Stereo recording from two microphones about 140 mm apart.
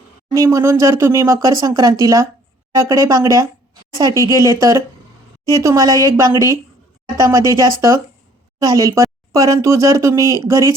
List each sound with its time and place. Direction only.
0.3 s speech: 20° right (ahead or behind)